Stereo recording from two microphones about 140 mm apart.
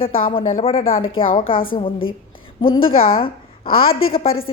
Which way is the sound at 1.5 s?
90° left.